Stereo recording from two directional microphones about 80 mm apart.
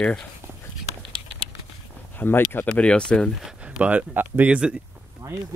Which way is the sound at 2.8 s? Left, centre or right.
Centre.